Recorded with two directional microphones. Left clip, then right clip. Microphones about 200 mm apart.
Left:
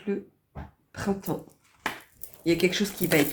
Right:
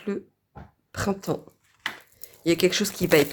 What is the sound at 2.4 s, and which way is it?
Speech, 45° right (ahead or behind).